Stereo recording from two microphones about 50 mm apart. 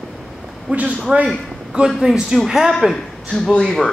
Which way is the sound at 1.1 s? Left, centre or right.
Centre.